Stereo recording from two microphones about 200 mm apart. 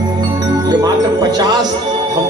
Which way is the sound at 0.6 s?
20° right (ahead or behind).